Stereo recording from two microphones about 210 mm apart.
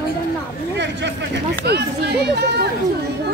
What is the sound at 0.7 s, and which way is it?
Speech, 55° right (ahead or behind).